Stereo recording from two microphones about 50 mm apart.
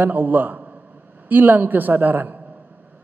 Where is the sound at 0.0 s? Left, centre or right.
Right.